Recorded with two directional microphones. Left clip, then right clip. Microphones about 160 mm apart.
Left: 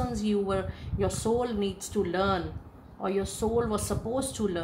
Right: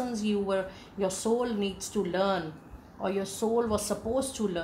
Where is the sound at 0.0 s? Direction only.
35° left (ahead or behind).